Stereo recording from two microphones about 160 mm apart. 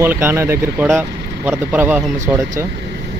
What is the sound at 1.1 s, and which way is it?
Vehicle, 90° right.